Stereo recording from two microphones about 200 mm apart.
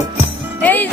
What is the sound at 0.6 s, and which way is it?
Music, 10° left (ahead or behind).